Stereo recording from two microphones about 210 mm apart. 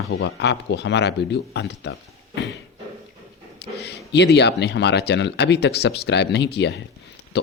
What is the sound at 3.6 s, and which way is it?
Speech, 50° left (ahead or behind).